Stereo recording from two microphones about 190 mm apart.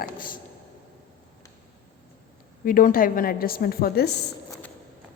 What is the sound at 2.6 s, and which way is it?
A woman's voice, 45° left (ahead or behind).